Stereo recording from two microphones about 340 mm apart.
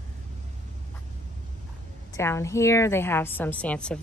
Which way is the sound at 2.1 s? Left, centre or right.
Centre.